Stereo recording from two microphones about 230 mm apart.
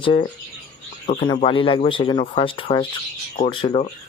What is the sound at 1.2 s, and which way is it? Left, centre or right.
Speech, left.